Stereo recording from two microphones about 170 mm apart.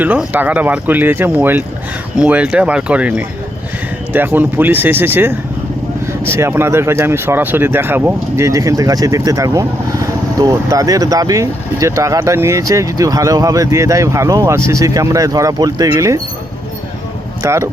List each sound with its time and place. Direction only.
0.0 s speech: 10° right (ahead or behind)
17.4 s speech: 15° right (ahead or behind)